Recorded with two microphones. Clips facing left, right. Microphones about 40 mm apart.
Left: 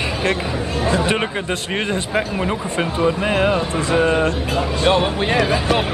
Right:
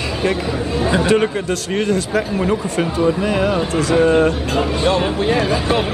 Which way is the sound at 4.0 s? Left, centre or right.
Centre.